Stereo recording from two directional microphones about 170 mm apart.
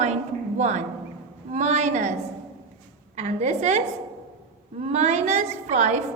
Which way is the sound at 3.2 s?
40° right (ahead or behind).